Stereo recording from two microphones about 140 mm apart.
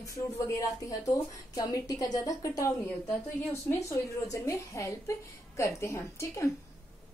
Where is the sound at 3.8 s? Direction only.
20° left (ahead or behind).